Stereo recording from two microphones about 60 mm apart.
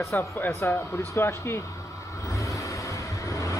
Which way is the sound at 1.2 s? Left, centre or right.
Left.